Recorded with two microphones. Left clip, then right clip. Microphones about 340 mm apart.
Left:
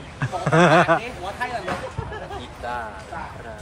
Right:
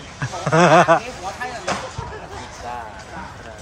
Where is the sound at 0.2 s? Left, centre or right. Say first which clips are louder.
Right 2 dB; centre.